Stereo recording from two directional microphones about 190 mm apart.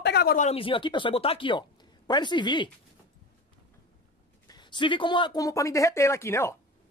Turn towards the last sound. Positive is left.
turn(degrees=15)  # may be behind; listen again after turning